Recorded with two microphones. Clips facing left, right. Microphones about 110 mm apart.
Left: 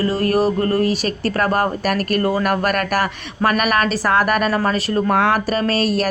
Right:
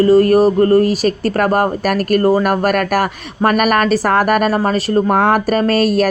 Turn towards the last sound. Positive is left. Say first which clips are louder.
# right 5 dB
turn(degrees=-45)  # may be behind; listen again after turning